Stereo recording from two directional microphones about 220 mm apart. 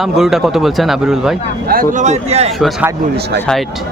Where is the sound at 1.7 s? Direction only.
35° right (ahead or behind).